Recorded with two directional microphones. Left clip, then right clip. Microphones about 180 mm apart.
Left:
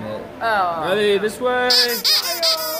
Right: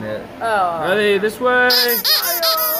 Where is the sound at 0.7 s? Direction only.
35° right (ahead or behind).